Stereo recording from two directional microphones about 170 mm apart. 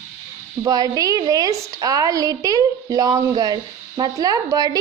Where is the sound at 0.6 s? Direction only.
20° right (ahead or behind).